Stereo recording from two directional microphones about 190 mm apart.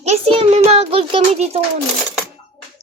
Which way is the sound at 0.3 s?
35° right (ahead or behind).